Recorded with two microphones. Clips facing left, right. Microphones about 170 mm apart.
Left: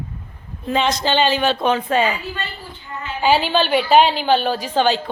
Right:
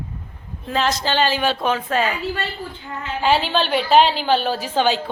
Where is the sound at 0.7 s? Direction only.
Centre (ahead or behind).